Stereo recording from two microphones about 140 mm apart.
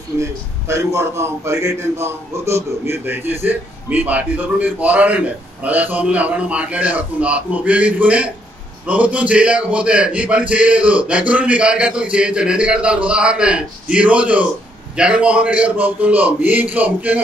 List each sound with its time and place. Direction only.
0.2 s a man's voice: 20° right (ahead or behind)